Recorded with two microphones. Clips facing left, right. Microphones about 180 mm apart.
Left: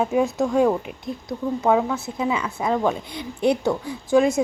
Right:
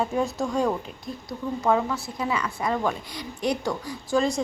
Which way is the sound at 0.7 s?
20° left (ahead or behind).